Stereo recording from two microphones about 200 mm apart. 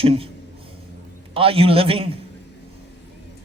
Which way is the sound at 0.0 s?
30° right (ahead or behind).